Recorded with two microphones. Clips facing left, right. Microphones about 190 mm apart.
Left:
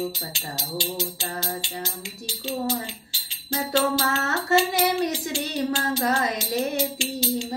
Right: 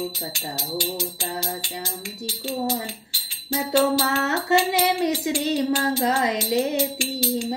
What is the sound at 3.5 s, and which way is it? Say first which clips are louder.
Music: right 3 dB; 20° right (ahead or behind).